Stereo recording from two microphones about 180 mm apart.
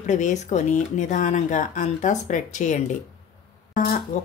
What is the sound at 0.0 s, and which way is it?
Speech, 45° left (ahead or behind).